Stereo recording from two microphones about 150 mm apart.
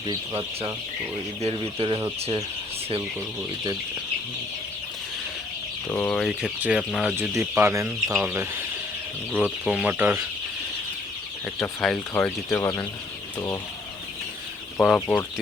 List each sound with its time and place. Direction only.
1.4 s speech: 40° right (ahead or behind)
5.9 s speech: 10° left (ahead or behind)
7.2 s speech: 15° right (ahead or behind)
11.6 s speech: 5° left (ahead or behind)
14.8 s speech: 5° left (ahead or behind)